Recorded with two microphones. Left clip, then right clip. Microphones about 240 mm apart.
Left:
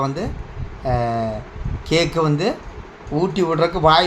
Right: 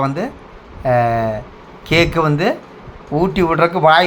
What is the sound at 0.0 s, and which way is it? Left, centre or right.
Speech, centre.